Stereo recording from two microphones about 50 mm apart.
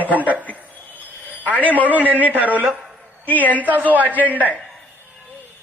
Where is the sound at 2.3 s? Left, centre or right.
Right.